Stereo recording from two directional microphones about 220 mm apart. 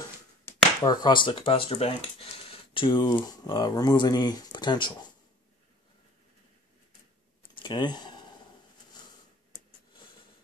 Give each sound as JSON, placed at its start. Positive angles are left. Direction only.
{"t": 0.5, "sound": "speech", "side_deg": 20}
{"t": 7.5, "sound": "speech", "side_deg": 20}